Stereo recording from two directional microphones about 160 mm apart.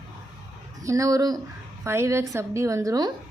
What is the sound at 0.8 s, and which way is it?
Speech, 20° right (ahead or behind).